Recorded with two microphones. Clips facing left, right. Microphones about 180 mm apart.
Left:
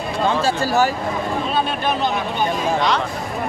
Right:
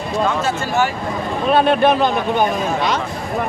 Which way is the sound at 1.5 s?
60° right (ahead or behind).